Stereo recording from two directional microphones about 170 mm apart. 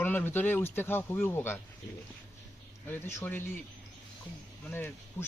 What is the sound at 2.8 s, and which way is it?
Speech, 10° left (ahead or behind).